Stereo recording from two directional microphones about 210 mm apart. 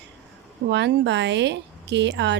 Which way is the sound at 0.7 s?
55° right (ahead or behind).